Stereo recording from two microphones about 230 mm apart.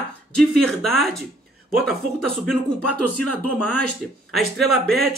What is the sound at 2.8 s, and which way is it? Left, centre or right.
Speech, left.